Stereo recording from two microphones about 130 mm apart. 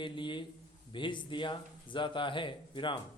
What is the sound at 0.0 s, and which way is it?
Speech, 40° left (ahead or behind).